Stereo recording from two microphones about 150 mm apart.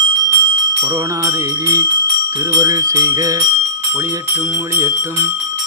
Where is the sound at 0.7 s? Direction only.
20° right (ahead or behind).